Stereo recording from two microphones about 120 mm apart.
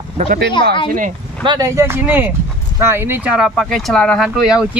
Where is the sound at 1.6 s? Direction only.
25° right (ahead or behind); by 4.3 s 5° left (ahead or behind).